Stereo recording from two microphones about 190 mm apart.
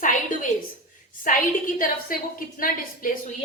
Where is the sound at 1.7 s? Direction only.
45° left (ahead or behind).